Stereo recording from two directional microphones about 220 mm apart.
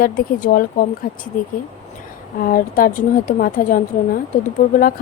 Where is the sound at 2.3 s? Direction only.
40° left (ahead or behind).